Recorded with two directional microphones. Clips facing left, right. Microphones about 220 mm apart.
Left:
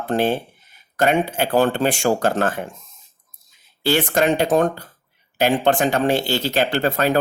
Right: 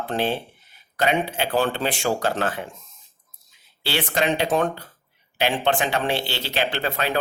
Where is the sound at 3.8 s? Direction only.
45° left (ahead or behind).